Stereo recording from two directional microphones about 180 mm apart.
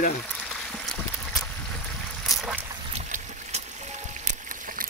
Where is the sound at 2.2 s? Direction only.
Centre (ahead or behind).